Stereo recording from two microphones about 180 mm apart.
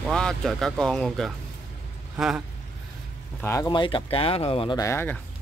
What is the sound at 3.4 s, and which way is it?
Speech, 15° left (ahead or behind).